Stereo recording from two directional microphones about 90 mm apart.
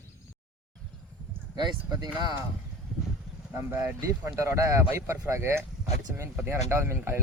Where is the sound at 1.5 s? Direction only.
50° right (ahead or behind).